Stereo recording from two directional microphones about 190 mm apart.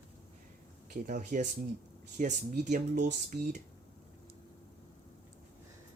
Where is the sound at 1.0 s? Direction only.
45° right (ahead or behind).